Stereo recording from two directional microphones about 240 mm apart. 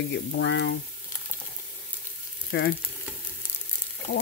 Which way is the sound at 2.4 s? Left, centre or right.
Left.